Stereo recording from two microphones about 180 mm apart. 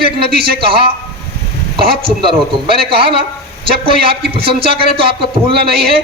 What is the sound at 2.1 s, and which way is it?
A man's voice, 30° right (ahead or behind).